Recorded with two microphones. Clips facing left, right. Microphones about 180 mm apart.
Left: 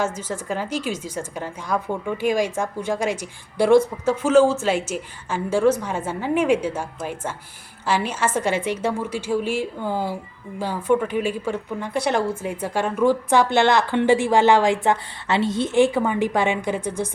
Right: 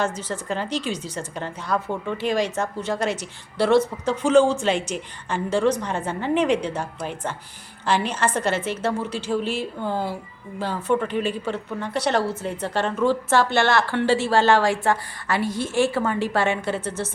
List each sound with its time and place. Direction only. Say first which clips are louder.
0.0 s a woman's voice: left 1 dB; 10° left (ahead or behind)